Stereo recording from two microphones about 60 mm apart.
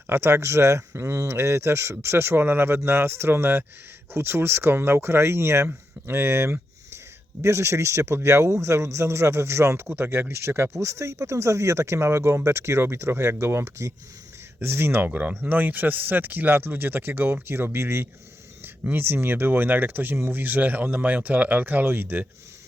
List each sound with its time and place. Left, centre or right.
0.1 s speech: right
14.6 s speech: right
15.1 s speech: right